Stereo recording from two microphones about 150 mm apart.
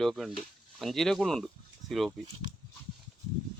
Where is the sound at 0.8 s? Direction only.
Centre (ahead or behind).